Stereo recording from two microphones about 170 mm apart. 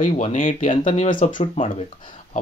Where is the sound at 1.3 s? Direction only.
30° left (ahead or behind).